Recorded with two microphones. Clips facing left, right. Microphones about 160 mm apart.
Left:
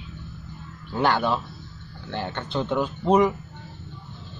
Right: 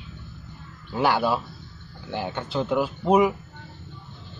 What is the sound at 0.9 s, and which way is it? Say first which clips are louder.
Speech: even; 10° right (ahead or behind).